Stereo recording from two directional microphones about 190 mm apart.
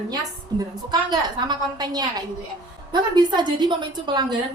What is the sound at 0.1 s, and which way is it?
A woman's voice, 20° right (ahead or behind).